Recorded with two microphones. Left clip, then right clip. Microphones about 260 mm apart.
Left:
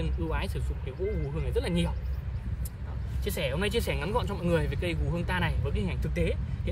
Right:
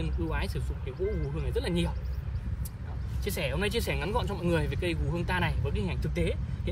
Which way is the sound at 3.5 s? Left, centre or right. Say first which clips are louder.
Left 1 dB; centre.